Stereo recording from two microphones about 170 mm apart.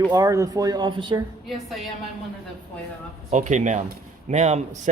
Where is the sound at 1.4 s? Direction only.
Centre (ahead or behind).